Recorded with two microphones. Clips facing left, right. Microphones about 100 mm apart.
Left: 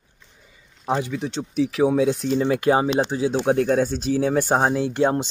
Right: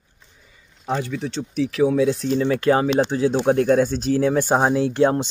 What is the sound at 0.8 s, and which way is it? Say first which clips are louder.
Speech: left 1 dB; 15° left (ahead or behind).